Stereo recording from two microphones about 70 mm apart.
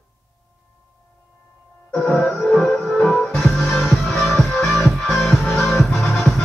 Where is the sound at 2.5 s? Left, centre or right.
Centre.